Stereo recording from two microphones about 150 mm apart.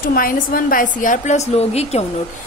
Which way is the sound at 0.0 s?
70° left (ahead or behind).